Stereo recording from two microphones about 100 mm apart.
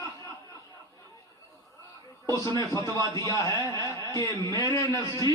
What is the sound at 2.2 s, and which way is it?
A man's voice, 30° left (ahead or behind).